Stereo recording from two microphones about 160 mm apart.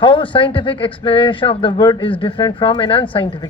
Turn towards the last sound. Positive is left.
turn(degrees=30)  # may be behind; listen again after turning